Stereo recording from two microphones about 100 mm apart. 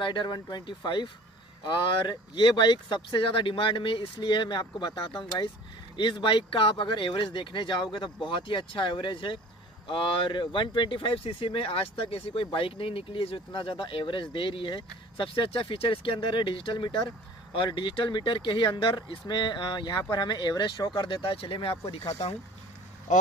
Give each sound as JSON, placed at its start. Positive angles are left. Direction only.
{"t": 0.0, "sound": "speech", "side_deg": 50}
{"t": 21.0, "sound": "speech", "side_deg": 60}